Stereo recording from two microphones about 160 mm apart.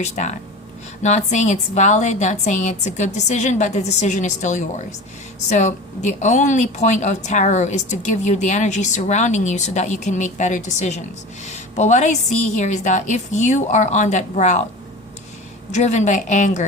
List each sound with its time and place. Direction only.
0.0 s a woman's voice: 45° left (ahead or behind)
15.7 s a woman's voice: 45° left (ahead or behind)